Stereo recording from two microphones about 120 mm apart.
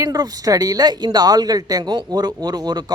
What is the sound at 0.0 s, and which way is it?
A man's voice, 30° right (ahead or behind).